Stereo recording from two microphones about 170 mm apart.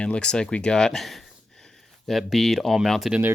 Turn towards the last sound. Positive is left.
turn(degrees=0)  # may be behind; listen again after turning